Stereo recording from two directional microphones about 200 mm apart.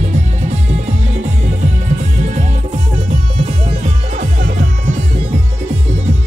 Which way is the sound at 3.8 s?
40° right (ahead or behind).